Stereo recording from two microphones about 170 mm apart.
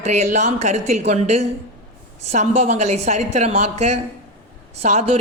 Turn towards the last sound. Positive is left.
turn(degrees=-40)  # may be behind; listen again after turning